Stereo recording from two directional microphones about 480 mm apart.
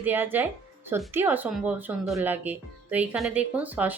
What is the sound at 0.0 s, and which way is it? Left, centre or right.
Speech, centre.